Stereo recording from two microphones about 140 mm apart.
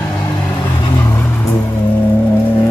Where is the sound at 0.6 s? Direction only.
30° left (ahead or behind).